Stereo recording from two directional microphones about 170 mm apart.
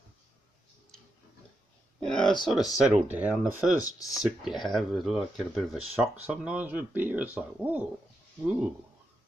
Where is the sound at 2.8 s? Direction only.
10° right (ahead or behind).